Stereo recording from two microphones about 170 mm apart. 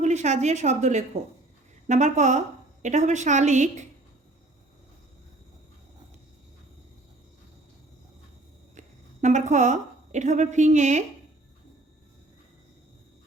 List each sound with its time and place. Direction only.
0.0 s a woman's voice: 45° right (ahead or behind)
9.2 s a woman's voice: 45° right (ahead or behind)